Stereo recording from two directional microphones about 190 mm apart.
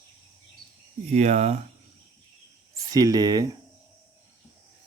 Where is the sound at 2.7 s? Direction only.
20° right (ahead or behind).